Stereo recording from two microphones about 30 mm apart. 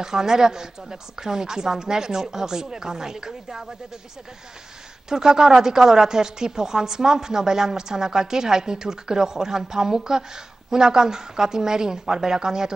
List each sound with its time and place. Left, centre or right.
0.0 s speech: centre
5.1 s speech: right